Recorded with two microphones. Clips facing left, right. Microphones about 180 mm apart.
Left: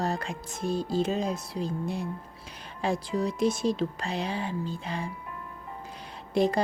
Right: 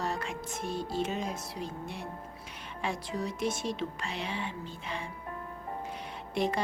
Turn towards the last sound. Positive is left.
turn(degrees=35)  # may be behind; listen again after turning